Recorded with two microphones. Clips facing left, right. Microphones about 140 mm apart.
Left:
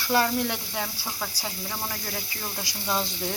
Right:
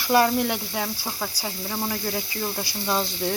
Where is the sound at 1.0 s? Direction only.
30° right (ahead or behind).